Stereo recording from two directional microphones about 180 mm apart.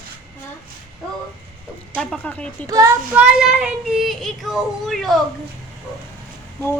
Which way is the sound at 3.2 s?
5° right (ahead or behind).